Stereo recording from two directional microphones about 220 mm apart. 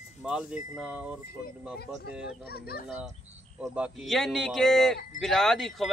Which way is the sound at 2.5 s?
45° left (ahead or behind).